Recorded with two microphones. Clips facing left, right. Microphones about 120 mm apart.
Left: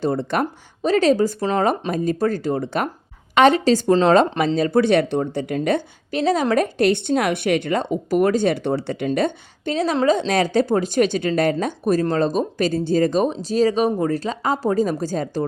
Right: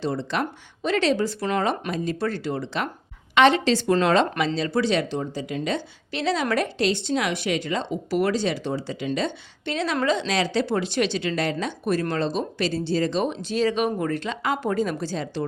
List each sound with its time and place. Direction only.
0.0 s speech: 50° left (ahead or behind)
9.0 s speech: 50° left (ahead or behind)
9.7 s speech: 35° left (ahead or behind)